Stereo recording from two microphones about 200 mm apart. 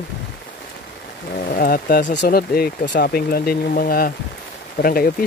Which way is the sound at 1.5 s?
45° left (ahead or behind).